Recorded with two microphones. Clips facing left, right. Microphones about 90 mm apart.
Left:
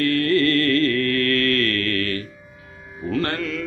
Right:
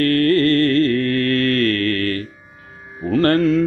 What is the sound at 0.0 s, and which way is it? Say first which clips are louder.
Mantra: right 4 dB; 45° right (ahead or behind).